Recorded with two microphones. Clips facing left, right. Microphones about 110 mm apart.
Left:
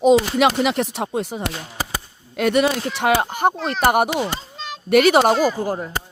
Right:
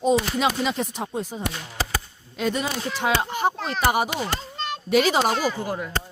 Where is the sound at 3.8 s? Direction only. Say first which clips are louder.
Left 5 dB; 55° left (ahead or behind).